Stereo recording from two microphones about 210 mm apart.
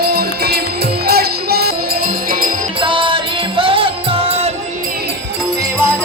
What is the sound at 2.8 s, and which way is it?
Music, 25° right (ahead or behind).